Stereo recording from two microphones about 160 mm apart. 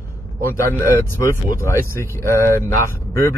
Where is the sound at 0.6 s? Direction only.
15° left (ahead or behind).